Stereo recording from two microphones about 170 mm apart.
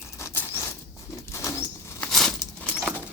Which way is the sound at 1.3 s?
15° left (ahead or behind).